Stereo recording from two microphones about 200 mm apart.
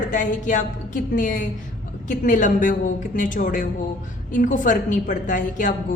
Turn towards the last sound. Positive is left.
turn(degrees=40)  # may be behind; listen again after turning